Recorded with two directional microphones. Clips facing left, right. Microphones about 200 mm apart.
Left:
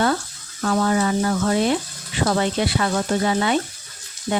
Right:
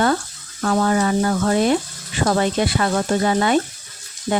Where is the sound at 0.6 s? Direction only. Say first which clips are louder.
Right 1 dB; 45° right (ahead or behind).